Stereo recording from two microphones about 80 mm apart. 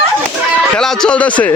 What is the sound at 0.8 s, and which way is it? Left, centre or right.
Speech, centre.